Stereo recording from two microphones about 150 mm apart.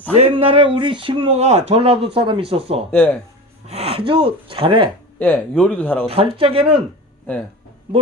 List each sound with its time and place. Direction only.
0.2 s speech: 40° right (ahead or behind)
2.9 s speech: 10° left (ahead or behind)
3.7 s speech: 40° right (ahead or behind)
5.2 s speech: 10° left (ahead or behind)
6.1 s speech: 40° right (ahead or behind)
7.3 s speech: 10° left (ahead or behind)